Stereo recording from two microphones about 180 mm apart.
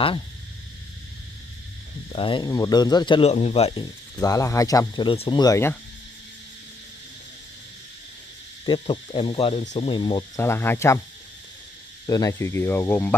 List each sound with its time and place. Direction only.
2.1 s speech: 25° left (ahead or behind)
4.2 s speech: 20° left (ahead or behind)
5.4 s speech: 15° left (ahead or behind)
8.6 s speech: 30° left (ahead or behind)
10.4 s speech: 15° left (ahead or behind)
12.1 s speech: 20° left (ahead or behind)